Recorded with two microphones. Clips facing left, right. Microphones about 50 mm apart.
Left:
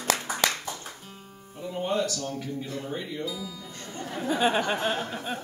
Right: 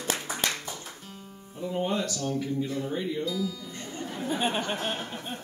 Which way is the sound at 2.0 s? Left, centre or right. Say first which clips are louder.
Left 2 dB; centre.